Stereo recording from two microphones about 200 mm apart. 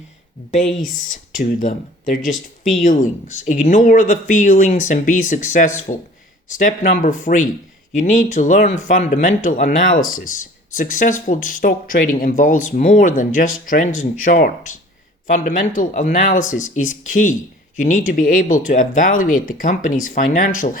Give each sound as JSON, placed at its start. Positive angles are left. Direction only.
{"t": 0.5, "sound": "speech", "side_deg": 35}